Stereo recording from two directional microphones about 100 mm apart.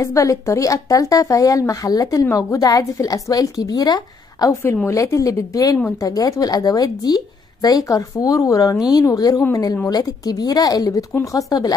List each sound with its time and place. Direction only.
0.0 s a woman's voice: 35° left (ahead or behind)